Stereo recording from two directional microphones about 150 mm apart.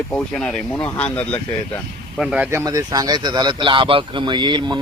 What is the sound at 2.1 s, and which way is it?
Speech, 5° right (ahead or behind).